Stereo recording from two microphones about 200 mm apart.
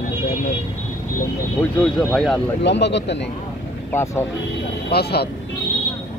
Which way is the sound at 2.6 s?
60° left (ahead or behind).